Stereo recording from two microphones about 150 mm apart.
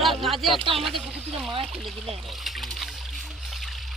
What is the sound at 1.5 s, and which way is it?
Speech, 35° right (ahead or behind).